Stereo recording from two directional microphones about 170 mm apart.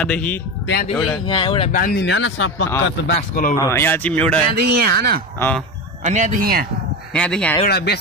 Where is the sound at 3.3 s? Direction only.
55° left (ahead or behind).